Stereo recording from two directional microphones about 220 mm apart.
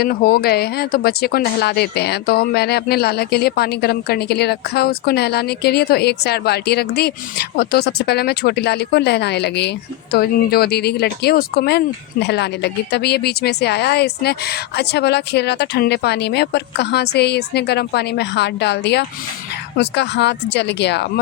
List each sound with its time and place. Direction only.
0.0 s speech: 45° left (ahead or behind)